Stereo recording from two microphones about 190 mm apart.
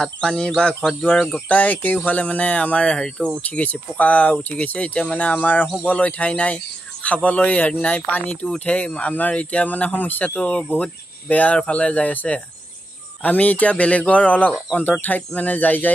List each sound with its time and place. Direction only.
0.0 s speech: 5° left (ahead or behind)